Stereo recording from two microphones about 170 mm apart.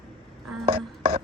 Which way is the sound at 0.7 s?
35° right (ahead or behind).